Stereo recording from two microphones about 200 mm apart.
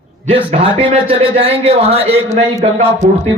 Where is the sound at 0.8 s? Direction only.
30° right (ahead or behind).